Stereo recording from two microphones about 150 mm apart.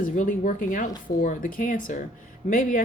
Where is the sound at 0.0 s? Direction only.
65° left (ahead or behind).